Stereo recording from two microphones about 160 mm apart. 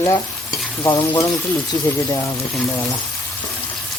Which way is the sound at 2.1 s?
20° left (ahead or behind).